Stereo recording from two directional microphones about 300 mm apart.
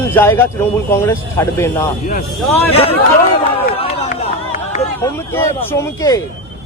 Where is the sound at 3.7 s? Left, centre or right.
Centre.